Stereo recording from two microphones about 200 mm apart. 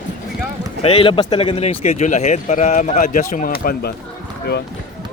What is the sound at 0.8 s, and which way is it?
Speech, 30° left (ahead or behind).